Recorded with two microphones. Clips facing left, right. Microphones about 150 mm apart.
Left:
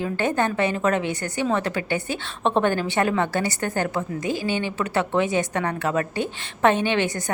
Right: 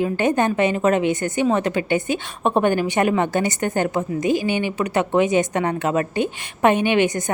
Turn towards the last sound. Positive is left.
turn(degrees=-20)  # may be behind; listen again after turning